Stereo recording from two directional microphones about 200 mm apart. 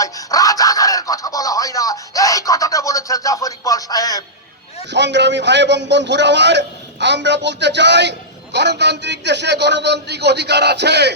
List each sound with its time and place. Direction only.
0.0 s speech: 15° left (ahead or behind)
4.9 s a man's voice: 60° right (ahead or behind)